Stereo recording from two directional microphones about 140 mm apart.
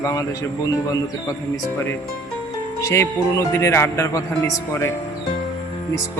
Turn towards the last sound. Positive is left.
turn(degrees=15)  # may be behind; listen again after turning